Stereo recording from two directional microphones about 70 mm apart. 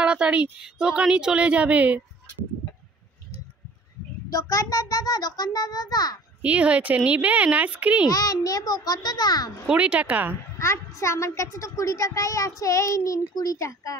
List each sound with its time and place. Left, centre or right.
0.0 s speech: centre
4.3 s a child's voice: left
6.4 s speech: centre
8.1 s a child's voice: left
9.7 s speech: centre
10.6 s a child's voice: left